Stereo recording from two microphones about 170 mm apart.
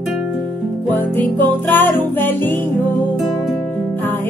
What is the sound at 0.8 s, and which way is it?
Music, 10° left (ahead or behind).